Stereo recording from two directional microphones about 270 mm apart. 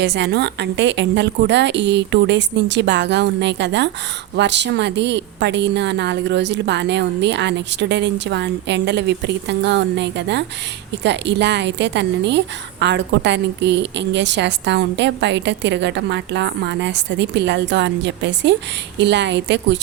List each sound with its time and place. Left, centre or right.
0.0 s a woman's voice: right